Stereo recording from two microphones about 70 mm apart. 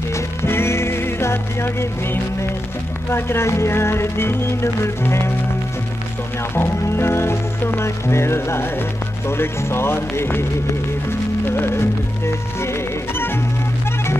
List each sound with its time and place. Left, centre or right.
0.1 s music: left
3.1 s speech: left
6.5 s speech: left
10.7 s music: left